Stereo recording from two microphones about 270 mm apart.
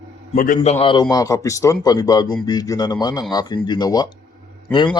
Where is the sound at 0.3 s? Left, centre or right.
Left.